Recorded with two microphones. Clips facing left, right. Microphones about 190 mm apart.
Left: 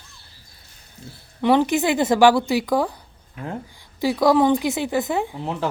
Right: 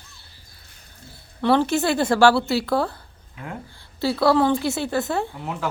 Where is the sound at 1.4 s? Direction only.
15° left (ahead or behind).